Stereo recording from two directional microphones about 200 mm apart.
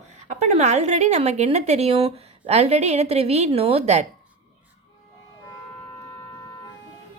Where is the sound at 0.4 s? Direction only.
35° right (ahead or behind).